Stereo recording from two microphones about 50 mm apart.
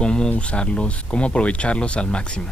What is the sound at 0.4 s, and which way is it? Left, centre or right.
Speech, left.